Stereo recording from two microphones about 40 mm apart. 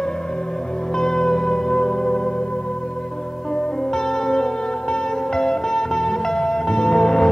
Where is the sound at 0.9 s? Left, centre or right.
Centre.